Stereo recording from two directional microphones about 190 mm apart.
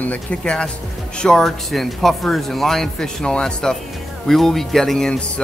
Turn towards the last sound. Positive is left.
turn(degrees=5)  # may be behind; listen again after turning